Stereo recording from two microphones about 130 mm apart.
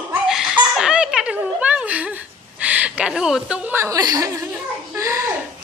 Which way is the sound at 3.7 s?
20° right (ahead or behind).